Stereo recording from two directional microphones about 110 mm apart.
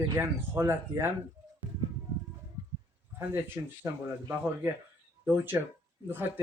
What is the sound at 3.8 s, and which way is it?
Speech, 25° right (ahead or behind).